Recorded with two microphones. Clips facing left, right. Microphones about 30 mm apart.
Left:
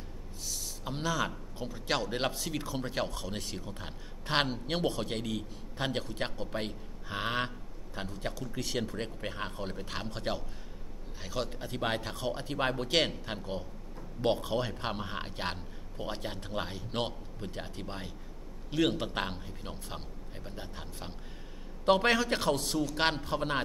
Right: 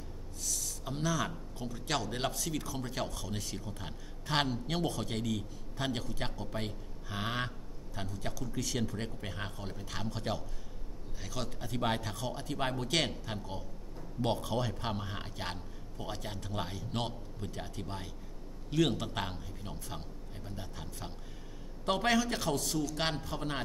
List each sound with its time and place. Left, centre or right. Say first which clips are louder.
0.4 s a man's voice: right 1 dB; left
9.6 s a man's voice: left 3 dB; left; by 18.9 s centre
18.9 s a man's voice: left 3 dB; left
21.8 s a man's voice: left 4 dB; left